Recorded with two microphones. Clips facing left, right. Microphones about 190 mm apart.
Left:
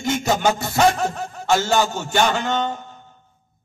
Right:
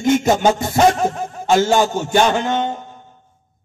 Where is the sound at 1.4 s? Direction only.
15° right (ahead or behind).